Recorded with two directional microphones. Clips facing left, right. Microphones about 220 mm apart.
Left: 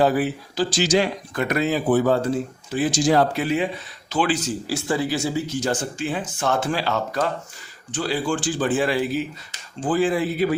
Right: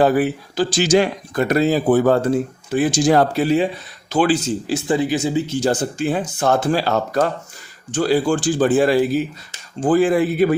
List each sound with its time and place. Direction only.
0.0 s speech: 55° right (ahead or behind)
1.4 s speech: 35° right (ahead or behind)
2.6 s speech: 55° right (ahead or behind)
3.3 s speech: 35° right (ahead or behind)
4.4 s speech: 20° right (ahead or behind); by 10.5 s 55° right (ahead or behind)